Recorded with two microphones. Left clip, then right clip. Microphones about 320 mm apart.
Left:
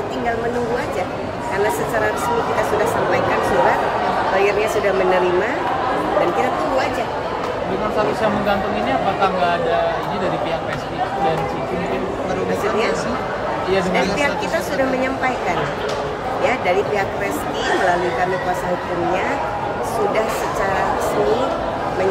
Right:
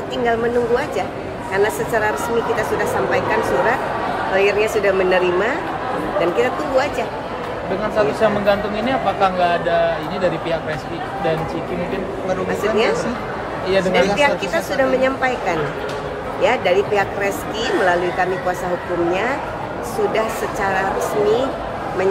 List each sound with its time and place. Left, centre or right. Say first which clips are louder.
4.4 s speech: right 1 dB; centre
13.7 s a man's voice: right 4 dB; right
16.4 s speech: right 3 dB; centre